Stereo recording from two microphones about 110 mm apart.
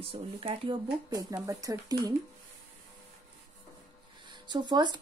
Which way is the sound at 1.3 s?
30° right (ahead or behind).